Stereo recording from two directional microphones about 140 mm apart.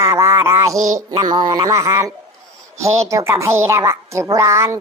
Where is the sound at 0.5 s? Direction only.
25° right (ahead or behind).